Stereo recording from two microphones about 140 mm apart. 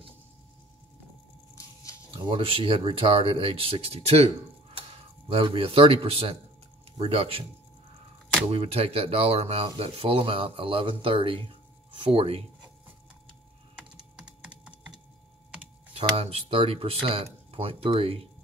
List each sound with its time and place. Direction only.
2.0 s speech: 40° right (ahead or behind)
5.3 s speech: 40° right (ahead or behind)
8.5 s speech: 45° right (ahead or behind)
14.1 s typing: 5° right (ahead or behind)
15.9 s speech: 45° right (ahead or behind)